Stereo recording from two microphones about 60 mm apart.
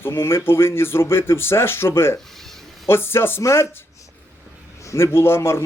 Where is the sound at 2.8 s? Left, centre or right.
Left.